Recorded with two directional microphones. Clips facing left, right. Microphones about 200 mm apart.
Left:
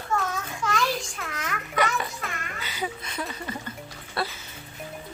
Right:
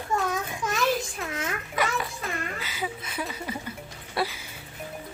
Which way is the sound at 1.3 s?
25° right (ahead or behind).